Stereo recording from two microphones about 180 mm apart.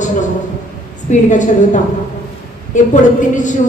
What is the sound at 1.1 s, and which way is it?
Speech, 45° left (ahead or behind).